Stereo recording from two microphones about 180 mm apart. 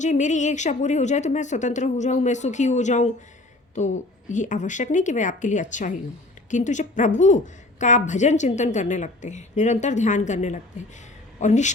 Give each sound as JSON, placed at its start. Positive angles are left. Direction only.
{"t": 0.0, "sound": "a woman's voice", "side_deg": 40}